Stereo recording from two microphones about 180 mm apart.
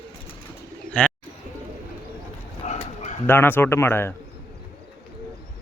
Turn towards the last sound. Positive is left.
turn(degrees=15)  # may be behind; listen again after turning